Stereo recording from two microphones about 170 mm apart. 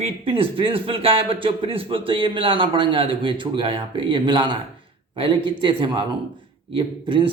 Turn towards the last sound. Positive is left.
turn(degrees=-30)  # may be behind; listen again after turning